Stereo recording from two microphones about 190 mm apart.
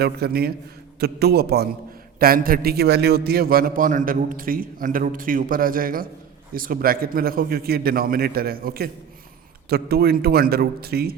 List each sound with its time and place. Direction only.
0.0 s a man's voice: 55° right (ahead or behind)